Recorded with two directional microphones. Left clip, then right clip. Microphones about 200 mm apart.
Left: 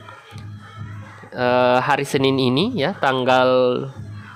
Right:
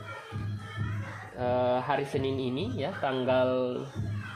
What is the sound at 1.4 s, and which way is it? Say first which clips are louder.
Speech: left 11 dB; 40° left (ahead or behind).